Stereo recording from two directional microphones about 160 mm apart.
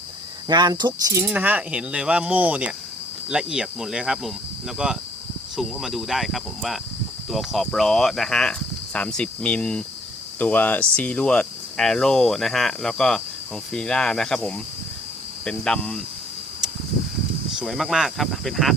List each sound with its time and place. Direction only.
0.4 s speech: 25° right (ahead or behind)
1.3 s speech: 10° right (ahead or behind)
17.6 s speech: centre (ahead or behind)